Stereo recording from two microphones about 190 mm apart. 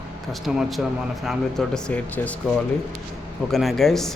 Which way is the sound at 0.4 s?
Centre (ahead or behind).